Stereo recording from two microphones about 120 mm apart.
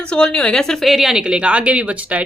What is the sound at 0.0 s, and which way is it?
A woman's voice, 10° left (ahead or behind).